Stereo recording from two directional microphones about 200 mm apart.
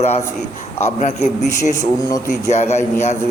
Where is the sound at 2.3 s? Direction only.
35° left (ahead or behind).